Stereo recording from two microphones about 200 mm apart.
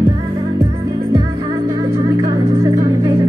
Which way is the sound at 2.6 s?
20° right (ahead or behind).